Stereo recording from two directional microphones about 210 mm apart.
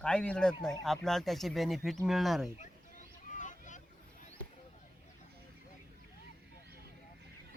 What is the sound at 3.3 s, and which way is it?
Vehicle, 35° left (ahead or behind).